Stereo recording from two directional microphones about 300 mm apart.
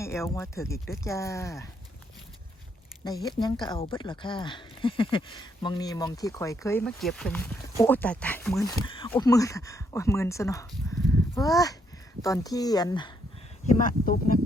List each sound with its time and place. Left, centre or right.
0.0 s speech: centre
3.2 s speech: centre
13.7 s speech: left